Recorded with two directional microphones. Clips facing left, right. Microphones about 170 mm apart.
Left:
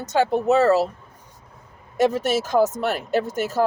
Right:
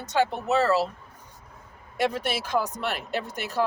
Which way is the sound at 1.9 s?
40° left (ahead or behind).